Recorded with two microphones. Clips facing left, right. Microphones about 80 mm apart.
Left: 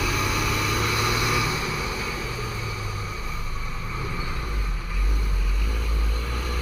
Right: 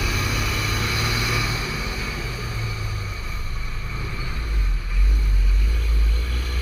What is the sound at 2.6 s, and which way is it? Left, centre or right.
Vehicle, left.